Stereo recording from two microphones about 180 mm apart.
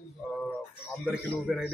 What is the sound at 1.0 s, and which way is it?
Speech, centre (ahead or behind).